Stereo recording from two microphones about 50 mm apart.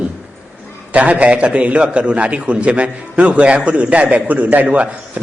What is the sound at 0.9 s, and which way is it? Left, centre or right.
A man's voice, right.